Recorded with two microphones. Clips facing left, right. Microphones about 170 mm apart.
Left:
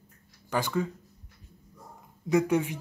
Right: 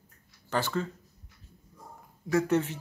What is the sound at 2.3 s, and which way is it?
Speech, 15° left (ahead or behind).